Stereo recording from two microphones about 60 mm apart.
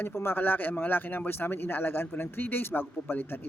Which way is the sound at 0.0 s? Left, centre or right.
Left.